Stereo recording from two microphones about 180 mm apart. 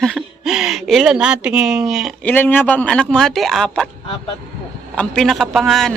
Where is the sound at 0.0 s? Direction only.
Centre (ahead or behind).